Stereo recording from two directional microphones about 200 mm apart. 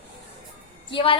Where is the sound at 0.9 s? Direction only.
25° left (ahead or behind).